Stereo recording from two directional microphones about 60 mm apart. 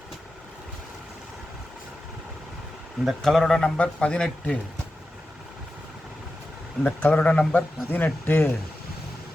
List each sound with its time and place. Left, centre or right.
3.2 s speech: centre
3.8 s speech: left
6.8 s speech: left